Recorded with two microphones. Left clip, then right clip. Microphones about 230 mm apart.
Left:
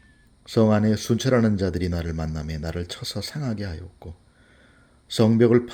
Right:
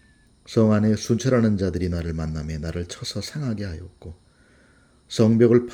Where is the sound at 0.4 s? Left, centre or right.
Centre.